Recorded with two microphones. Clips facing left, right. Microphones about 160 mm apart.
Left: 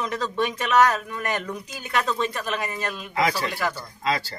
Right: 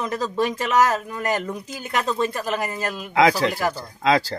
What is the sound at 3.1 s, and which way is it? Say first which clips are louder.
Speech: right 7 dB; 90° right.